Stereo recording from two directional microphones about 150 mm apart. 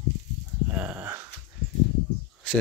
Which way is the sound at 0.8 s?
10° right (ahead or behind).